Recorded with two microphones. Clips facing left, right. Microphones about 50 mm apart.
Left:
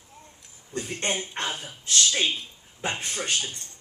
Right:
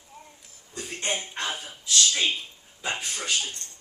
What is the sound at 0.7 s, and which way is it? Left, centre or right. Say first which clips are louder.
Speech: left 2 dB; left.